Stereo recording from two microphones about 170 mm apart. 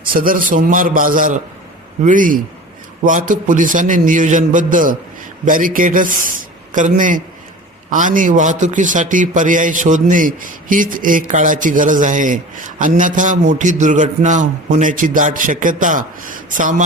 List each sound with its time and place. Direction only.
0.0 s a man's voice: 55° right (ahead or behind)